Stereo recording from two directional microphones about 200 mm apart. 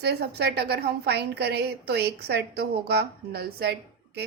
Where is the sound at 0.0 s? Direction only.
55° right (ahead or behind).